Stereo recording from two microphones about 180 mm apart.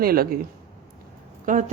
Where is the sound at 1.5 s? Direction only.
45° right (ahead or behind).